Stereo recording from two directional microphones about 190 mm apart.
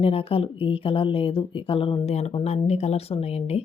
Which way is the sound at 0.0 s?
30° left (ahead or behind).